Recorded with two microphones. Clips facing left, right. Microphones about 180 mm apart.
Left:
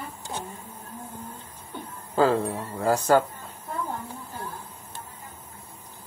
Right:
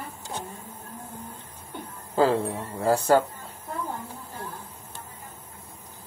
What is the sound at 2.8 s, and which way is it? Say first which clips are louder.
Speech: even; 30° right (ahead or behind).